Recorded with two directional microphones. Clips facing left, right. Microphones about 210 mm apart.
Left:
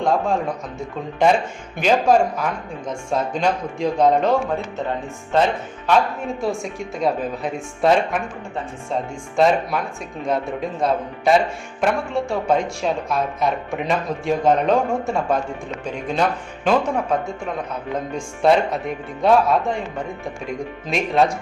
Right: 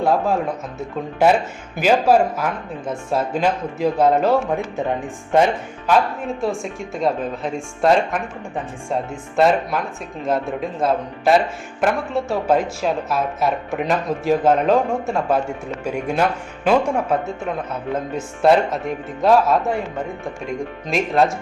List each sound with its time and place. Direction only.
0.0 s speech: 5° right (ahead or behind)
5.9 s speech: centre (ahead or behind)
9.3 s speech: centre (ahead or behind)